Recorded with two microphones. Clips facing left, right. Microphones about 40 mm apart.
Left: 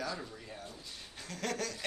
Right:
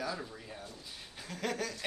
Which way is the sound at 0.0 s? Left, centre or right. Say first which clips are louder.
Right 1 dB; centre.